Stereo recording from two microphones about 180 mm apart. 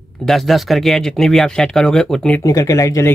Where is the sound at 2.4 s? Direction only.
20° left (ahead or behind).